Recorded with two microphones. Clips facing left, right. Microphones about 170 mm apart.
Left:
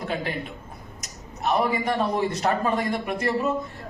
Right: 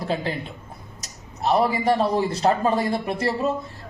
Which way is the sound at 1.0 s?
30° right (ahead or behind).